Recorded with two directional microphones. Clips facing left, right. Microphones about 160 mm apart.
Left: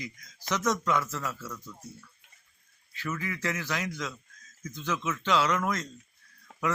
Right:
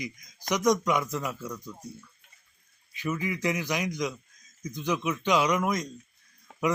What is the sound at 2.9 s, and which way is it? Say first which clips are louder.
Speech: right 4 dB; 15° right (ahead or behind).